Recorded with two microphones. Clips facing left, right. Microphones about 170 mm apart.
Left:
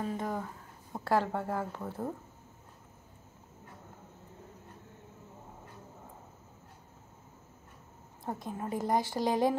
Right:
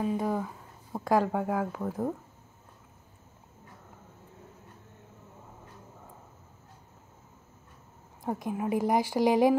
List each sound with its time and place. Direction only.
0.0 s a woman's voice: 10° right (ahead or behind)
8.3 s a woman's voice: 20° right (ahead or behind)